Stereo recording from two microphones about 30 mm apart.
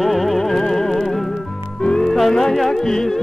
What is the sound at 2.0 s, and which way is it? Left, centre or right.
Music, centre.